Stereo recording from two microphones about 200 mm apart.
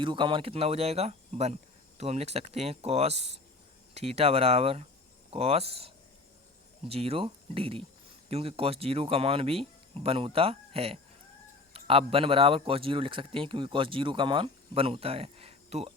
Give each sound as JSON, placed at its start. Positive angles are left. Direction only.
{"t": 0.0, "sound": "a man's voice", "side_deg": -25}